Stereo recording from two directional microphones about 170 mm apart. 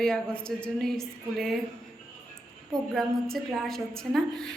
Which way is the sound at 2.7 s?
Centre (ahead or behind).